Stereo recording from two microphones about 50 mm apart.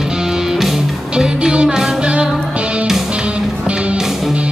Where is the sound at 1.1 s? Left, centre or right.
Centre.